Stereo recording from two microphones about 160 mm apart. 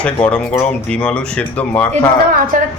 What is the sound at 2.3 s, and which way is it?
Speech, 60° right (ahead or behind).